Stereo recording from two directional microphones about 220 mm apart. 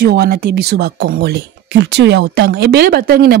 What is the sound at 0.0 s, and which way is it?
Speech, 45° right (ahead or behind).